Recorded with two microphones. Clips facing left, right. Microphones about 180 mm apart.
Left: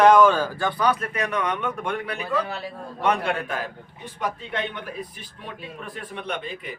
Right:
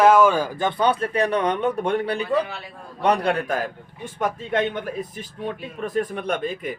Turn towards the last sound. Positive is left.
turn(degrees=-45)  # may be behind; listen again after turning